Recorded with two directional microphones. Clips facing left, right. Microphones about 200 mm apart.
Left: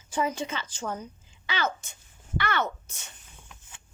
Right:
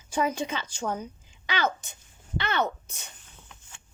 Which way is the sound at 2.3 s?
20° right (ahead or behind).